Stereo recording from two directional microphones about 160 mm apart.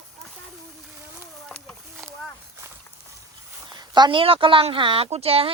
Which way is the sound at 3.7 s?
25° right (ahead or behind).